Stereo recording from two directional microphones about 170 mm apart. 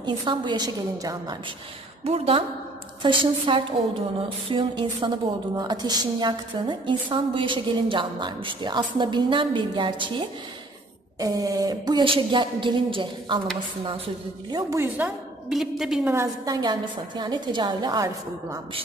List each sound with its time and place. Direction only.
0.0 s a woman's voice: 25° right (ahead or behind)
2.0 s a sound: 35° right (ahead or behind)
3.0 s a woman's voice: 30° right (ahead or behind)
4.5 s a sound: 30° right (ahead or behind)
5.6 s a woman's voice: 25° right (ahead or behind)
14.5 s a woman's voice: 20° right (ahead or behind); by 16.1 s centre (ahead or behind)
16.1 s a woman's voice: 20° right (ahead or behind)